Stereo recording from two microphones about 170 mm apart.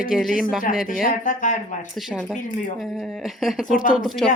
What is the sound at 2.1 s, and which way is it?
Speech, centre (ahead or behind).